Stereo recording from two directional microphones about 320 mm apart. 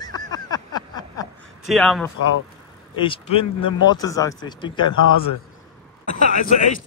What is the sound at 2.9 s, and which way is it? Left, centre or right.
Speech, centre.